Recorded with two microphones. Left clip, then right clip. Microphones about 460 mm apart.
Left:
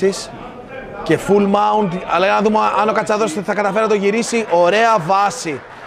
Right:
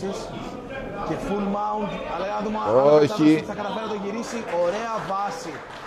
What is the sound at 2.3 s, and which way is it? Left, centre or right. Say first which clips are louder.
A man's voice: left 5 dB; left.